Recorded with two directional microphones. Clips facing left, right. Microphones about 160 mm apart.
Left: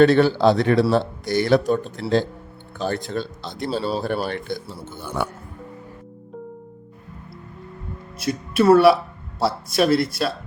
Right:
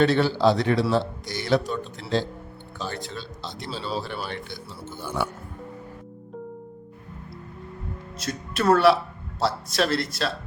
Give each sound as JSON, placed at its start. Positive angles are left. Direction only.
{"t": 0.0, "sound": "speech", "side_deg": 55}
{"t": 4.7, "sound": "speech", "side_deg": 15}
{"t": 8.2, "sound": "speech", "side_deg": 10}